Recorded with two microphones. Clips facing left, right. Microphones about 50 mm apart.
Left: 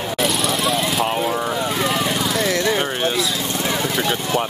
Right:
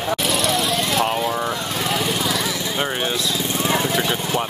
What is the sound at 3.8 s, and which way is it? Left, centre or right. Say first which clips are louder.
Speech: even; centre.